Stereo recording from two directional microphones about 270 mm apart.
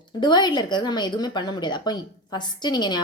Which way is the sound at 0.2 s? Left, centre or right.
Centre.